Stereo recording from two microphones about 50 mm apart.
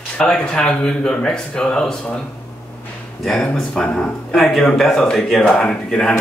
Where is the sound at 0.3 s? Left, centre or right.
Centre.